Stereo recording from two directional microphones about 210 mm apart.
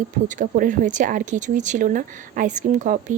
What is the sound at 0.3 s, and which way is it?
Speech, 40° right (ahead or behind).